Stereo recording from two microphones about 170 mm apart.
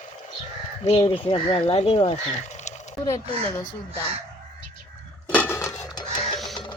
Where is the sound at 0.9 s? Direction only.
30° left (ahead or behind).